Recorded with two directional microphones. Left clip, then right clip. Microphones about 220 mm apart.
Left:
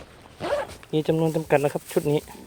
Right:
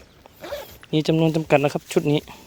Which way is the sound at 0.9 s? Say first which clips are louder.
Right 3 dB; 50° right (ahead or behind).